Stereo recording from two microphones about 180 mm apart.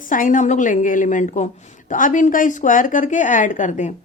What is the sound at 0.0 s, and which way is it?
A woman's voice, 50° left (ahead or behind).